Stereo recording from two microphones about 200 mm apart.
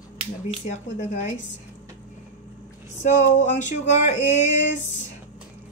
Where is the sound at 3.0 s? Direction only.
35° left (ahead or behind).